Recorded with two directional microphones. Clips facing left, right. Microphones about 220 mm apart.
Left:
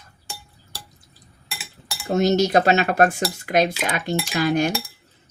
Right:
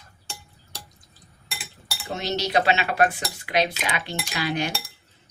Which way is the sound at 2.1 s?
45° left (ahead or behind).